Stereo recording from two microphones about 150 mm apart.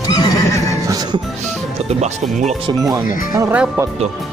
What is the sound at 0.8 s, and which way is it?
Music, 25° right (ahead or behind).